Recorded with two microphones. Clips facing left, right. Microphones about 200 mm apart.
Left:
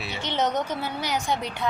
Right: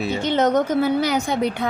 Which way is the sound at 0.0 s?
45° right (ahead or behind).